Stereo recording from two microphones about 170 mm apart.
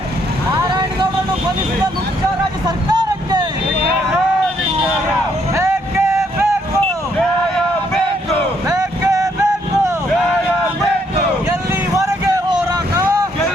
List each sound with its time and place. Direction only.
2.6 s vehicle: 25° right (ahead or behind)
5.5 s vehicle: 15° right (ahead or behind)
8.6 s vehicle: 20° right (ahead or behind)
11.4 s vehicle: 15° right (ahead or behind)